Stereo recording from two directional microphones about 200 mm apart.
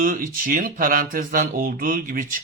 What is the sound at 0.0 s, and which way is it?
Speech, 45° right (ahead or behind).